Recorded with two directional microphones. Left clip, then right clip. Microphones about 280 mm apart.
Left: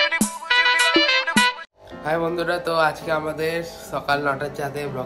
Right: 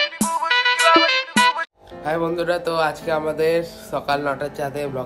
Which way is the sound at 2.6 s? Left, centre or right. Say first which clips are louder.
Even; centre.